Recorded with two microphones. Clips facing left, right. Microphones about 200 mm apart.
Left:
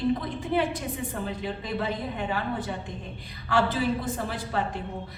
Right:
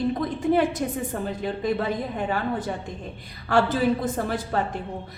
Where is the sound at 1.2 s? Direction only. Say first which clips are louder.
Right 6 dB; 45° right (ahead or behind).